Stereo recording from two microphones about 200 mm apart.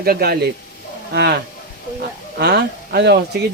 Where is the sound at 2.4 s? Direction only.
55° right (ahead or behind).